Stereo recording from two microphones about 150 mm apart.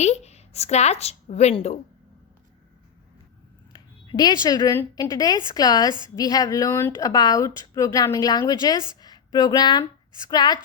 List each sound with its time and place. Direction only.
0.0 s speech: 45° left (ahead or behind)
4.0 s speech: 30° left (ahead or behind)